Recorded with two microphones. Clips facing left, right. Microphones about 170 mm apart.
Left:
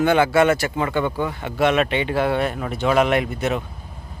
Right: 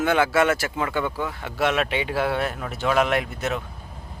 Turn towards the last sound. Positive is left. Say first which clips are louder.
# left 4 dB
turn(degrees=0)  # may be behind; listen again after turning